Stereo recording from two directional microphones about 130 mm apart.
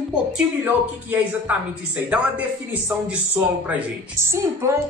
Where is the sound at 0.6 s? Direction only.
15° right (ahead or behind).